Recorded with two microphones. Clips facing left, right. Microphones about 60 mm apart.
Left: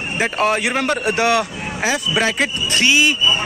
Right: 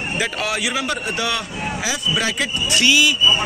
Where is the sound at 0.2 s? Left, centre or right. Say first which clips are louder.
Left 7 dB; left.